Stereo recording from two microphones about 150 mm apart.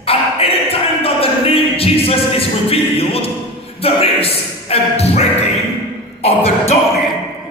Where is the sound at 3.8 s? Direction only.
40° left (ahead or behind).